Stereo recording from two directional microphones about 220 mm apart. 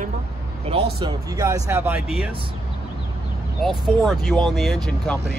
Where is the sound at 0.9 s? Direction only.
20° right (ahead or behind).